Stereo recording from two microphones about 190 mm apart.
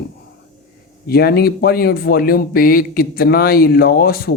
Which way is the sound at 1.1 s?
55° left (ahead or behind).